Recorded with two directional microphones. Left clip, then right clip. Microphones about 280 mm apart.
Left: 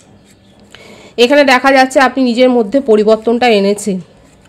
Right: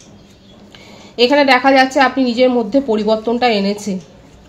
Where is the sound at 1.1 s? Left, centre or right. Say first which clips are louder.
Left 3 dB; left.